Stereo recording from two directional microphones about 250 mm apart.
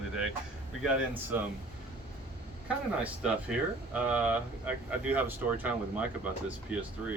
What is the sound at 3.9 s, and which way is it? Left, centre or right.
Speech, centre.